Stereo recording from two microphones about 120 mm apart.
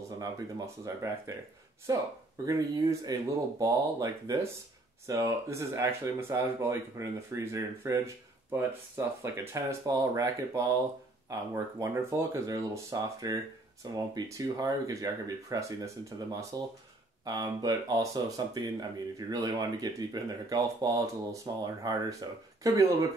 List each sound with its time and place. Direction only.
0.8 s speech: 25° right (ahead or behind)